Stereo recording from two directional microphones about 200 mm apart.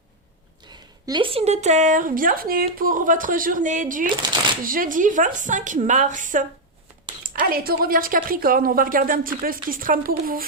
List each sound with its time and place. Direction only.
0.7 s a woman's voice: 20° right (ahead or behind); by 10.4 s 45° right (ahead or behind)